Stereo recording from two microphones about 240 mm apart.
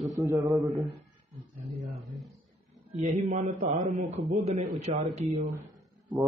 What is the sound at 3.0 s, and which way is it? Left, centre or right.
A man's voice, right.